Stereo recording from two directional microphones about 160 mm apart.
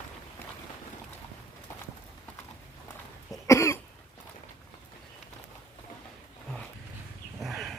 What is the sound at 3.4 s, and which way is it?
Cough, 20° left (ahead or behind).